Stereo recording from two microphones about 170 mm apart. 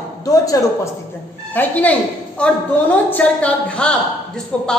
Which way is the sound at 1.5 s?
10° left (ahead or behind).